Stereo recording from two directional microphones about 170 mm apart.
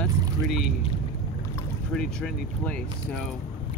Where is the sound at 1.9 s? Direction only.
5° left (ahead or behind).